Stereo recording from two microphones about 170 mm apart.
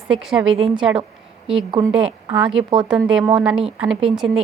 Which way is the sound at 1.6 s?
25° right (ahead or behind).